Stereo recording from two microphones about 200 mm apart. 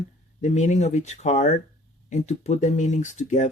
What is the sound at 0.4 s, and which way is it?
Speech, 35° left (ahead or behind).